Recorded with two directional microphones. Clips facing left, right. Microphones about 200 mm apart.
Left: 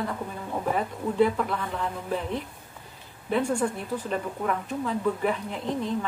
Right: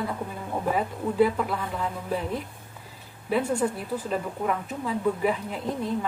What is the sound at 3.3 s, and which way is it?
Speech, 5° right (ahead or behind).